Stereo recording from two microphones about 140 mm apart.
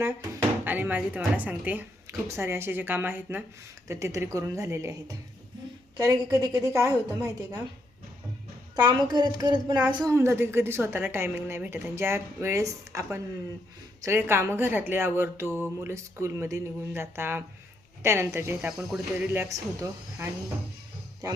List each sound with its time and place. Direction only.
0.0 s a woman's voice: 15° right (ahead or behind)
8.7 s a child's voice: 30° right (ahead or behind)